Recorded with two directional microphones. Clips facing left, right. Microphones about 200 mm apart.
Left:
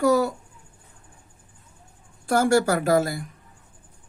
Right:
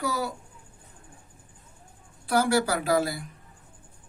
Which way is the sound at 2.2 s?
50° left (ahead or behind).